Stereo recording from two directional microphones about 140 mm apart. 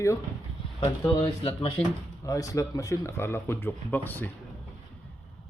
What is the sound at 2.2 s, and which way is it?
Speech, 25° left (ahead or behind).